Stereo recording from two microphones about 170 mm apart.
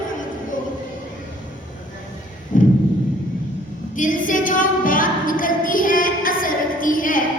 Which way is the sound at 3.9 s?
50° left (ahead or behind).